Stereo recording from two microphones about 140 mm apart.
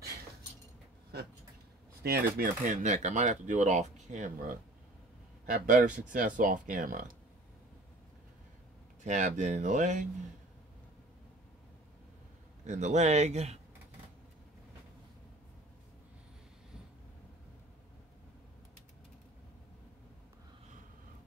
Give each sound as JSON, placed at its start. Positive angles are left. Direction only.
{"t": 2.0, "sound": "speech", "side_deg": -90}
{"t": 2.6, "sound": "speech", "side_deg": -55}
{"t": 9.0, "sound": "speech", "side_deg": -60}
{"t": 12.6, "sound": "speech", "side_deg": -60}